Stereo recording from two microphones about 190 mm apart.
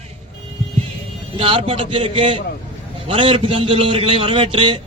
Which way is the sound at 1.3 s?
30° right (ahead or behind).